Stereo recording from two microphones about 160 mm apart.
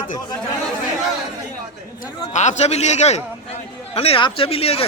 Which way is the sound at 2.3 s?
50° left (ahead or behind).